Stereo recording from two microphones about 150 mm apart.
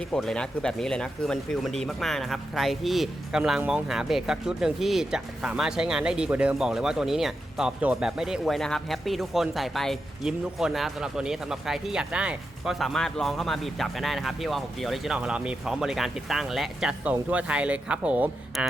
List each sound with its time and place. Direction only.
0.1 s speech: 5° left (ahead or behind)